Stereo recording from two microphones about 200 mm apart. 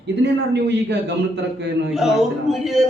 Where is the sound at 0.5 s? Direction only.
60° right (ahead or behind).